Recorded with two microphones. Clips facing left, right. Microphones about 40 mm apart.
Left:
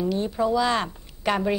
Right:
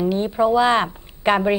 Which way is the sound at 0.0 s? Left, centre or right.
Right.